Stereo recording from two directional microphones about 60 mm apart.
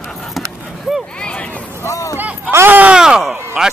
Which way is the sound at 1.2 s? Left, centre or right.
Centre.